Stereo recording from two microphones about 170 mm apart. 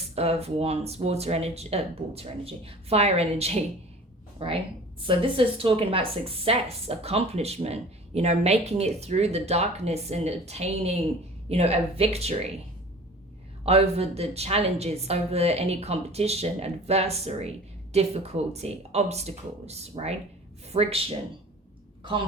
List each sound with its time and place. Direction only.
0.2 s a woman's voice: 40° right (ahead or behind)
13.7 s speech: 35° right (ahead or behind)